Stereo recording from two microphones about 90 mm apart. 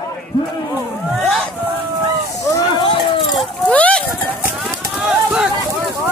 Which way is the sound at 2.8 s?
90° left.